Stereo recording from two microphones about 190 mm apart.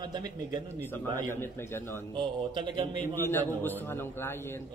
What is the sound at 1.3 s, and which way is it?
Speech, 10° left (ahead or behind).